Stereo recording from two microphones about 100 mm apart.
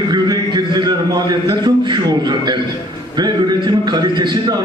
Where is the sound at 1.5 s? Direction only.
45° right (ahead or behind).